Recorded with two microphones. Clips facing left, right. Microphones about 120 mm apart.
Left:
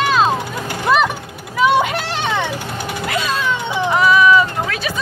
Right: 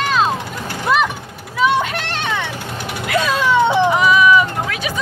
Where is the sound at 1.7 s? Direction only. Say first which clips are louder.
Left 3 dB; 10° left (ahead or behind).